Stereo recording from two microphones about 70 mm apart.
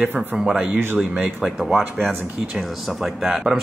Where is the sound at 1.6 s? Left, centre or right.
Centre.